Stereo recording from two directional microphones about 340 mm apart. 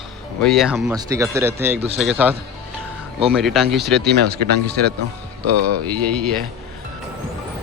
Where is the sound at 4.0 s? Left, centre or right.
Right.